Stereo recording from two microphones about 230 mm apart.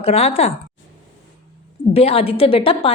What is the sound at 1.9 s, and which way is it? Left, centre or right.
A woman's voice, left.